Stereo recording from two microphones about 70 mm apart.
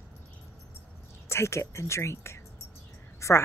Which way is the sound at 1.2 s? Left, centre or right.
Left.